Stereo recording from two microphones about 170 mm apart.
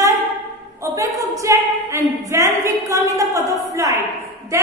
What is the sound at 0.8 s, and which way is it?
A woman's voice, 20° right (ahead or behind).